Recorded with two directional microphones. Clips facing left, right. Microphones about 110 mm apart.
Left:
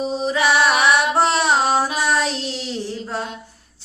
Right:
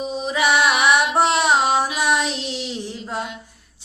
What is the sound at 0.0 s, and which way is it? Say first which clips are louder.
Music: left 3 dB; 35° left (ahead or behind).